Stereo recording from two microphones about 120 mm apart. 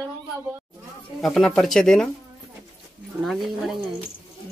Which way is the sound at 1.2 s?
Centre (ahead or behind).